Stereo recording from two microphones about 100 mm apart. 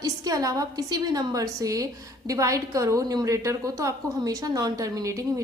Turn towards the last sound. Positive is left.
turn(degrees=-35)  # may be behind; listen again after turning